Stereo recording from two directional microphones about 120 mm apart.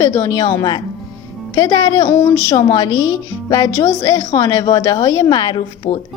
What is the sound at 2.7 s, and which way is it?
A woman's voice, 35° left (ahead or behind).